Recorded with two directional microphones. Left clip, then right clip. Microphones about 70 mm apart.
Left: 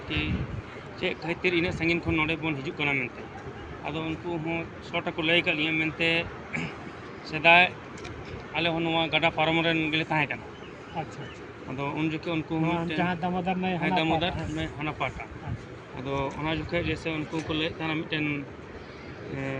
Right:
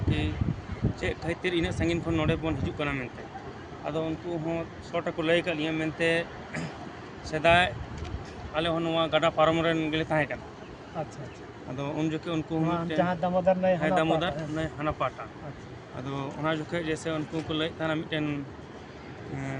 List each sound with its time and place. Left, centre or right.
1.3 s speech: right
4.4 s speech: right
7.3 s speech: right
10.1 s speech: right
11.8 s speech: right
16.9 s speech: right